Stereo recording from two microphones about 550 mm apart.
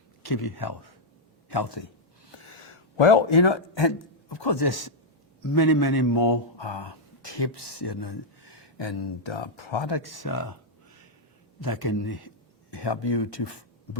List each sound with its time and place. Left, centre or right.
0.2 s a man's voice: left
2.4 s a man's voice: left
11.6 s speech: left